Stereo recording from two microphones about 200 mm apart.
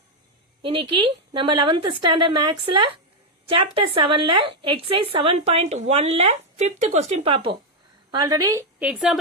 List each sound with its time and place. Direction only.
0.6 s a woman's voice: 25° right (ahead or behind)
8.8 s speech: 5° right (ahead or behind)